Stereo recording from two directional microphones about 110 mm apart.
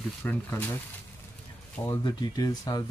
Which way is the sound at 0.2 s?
15° left (ahead or behind).